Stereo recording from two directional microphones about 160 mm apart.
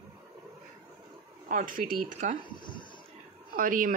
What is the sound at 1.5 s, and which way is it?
Speech, 55° right (ahead or behind).